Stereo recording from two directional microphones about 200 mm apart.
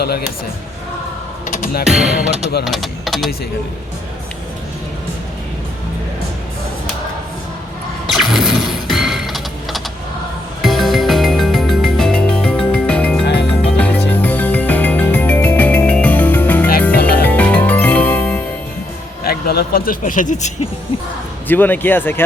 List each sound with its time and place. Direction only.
0.0 s speech: 50° left (ahead or behind)
1.5 s music: 40° left (ahead or behind)
1.8 s speech: 5° right (ahead or behind)
8.1 s a sound: centre (ahead or behind)
10.6 s music: centre (ahead or behind)
19.2 s speech: 50° left (ahead or behind)
21.4 s speech: 10° left (ahead or behind)